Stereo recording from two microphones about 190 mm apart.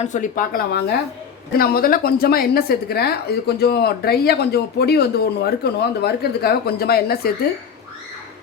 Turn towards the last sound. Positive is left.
turn(degrees=55)  # may be behind; listen again after turning